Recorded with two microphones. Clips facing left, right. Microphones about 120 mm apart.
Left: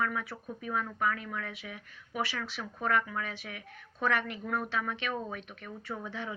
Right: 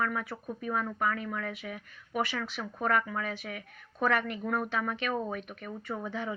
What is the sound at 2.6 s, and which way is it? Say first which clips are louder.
Speech: right 3 dB; 10° right (ahead or behind).